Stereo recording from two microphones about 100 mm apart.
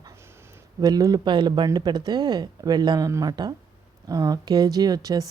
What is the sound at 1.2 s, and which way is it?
Speech, 50° right (ahead or behind).